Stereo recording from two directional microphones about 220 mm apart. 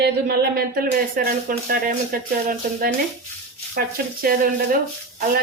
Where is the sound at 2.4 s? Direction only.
40° right (ahead or behind).